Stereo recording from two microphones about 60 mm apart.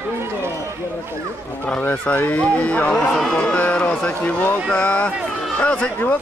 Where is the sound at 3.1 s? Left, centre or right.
Centre.